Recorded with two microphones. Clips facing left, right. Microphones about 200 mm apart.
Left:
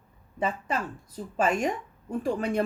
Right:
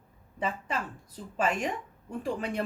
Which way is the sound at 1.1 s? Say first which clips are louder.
Left 4 dB; 45° left (ahead or behind).